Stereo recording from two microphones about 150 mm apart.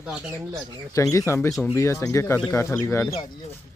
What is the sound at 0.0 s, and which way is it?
Speech, 5° right (ahead or behind).